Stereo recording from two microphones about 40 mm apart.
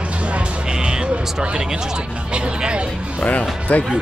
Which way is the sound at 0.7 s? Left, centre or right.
Centre.